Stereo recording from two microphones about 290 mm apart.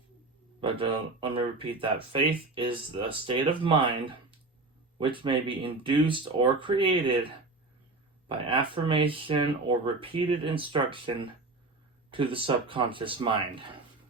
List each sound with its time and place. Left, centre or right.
0.6 s speech: centre
8.3 s speech: centre